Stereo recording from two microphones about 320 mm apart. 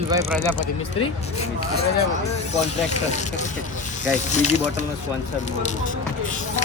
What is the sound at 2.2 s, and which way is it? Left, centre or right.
Pulleys, centre.